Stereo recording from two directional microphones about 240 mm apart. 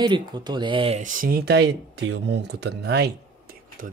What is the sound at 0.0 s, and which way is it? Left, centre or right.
Speech, centre.